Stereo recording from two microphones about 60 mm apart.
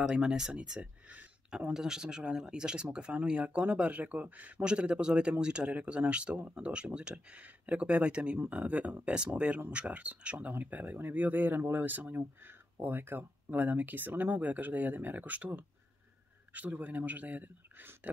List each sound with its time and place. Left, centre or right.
0.0 s speech: centre
0.7 s speech: right
1.7 s speech: centre; by 18.1 s right